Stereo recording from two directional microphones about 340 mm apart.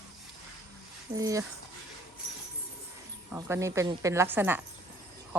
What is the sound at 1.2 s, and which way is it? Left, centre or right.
Speech, centre.